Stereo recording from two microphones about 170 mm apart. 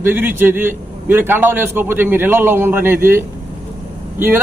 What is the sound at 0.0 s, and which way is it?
A man's voice, 10° right (ahead or behind).